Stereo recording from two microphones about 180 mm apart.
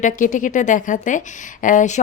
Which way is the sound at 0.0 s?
45° left (ahead or behind).